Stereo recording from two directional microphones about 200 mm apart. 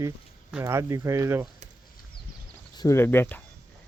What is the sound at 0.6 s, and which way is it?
Speech, 15° right (ahead or behind).